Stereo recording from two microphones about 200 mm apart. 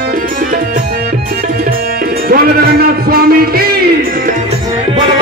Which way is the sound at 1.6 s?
45° right (ahead or behind).